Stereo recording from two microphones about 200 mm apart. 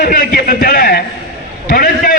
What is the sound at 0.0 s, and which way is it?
A man's voice, 45° left (ahead or behind).